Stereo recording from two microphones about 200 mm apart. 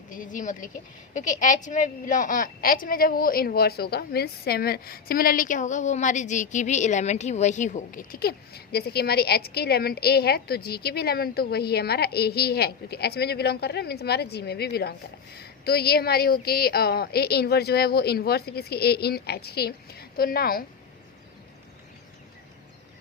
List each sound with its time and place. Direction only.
0.1 s a woman's voice: 40° left (ahead or behind)